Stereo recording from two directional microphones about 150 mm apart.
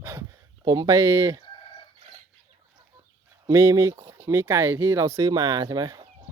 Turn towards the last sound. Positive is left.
turn(degrees=-25)  # may be behind; listen again after turning